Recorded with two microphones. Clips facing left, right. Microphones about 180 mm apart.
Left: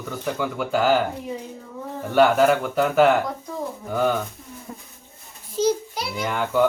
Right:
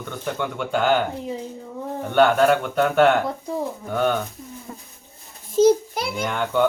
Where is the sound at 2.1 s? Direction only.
5° left (ahead or behind).